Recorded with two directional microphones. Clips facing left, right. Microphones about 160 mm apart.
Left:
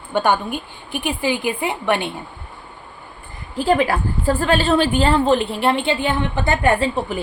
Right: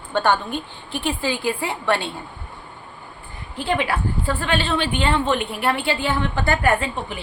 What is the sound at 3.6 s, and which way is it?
A woman's voice, 40° left (ahead or behind).